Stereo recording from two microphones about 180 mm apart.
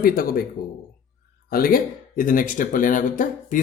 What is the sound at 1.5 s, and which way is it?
Speech, 55° left (ahead or behind).